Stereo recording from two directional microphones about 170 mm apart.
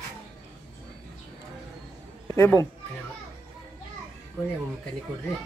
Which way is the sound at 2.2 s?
15° left (ahead or behind).